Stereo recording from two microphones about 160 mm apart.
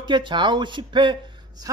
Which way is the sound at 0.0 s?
30° right (ahead or behind).